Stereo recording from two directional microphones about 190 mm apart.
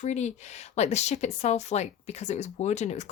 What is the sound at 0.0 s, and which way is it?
A woman's voice, 40° left (ahead or behind).